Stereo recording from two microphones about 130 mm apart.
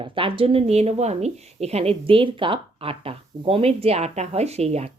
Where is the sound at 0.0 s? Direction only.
40° right (ahead or behind).